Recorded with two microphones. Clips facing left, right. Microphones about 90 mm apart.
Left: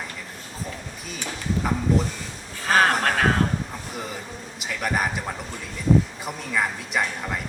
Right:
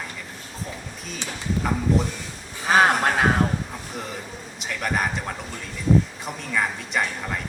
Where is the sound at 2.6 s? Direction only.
15° right (ahead or behind).